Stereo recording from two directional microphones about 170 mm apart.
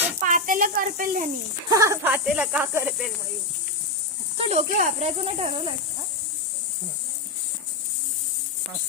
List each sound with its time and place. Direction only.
0.2 s speech: 50° right (ahead or behind)
1.7 s speech: 20° right (ahead or behind)
2.0 s speech: 10° right (ahead or behind)
4.4 s speech: 40° right (ahead or behind)